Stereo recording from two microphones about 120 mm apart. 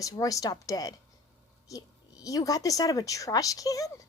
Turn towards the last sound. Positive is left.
turn(degrees=30)  # may be behind; listen again after turning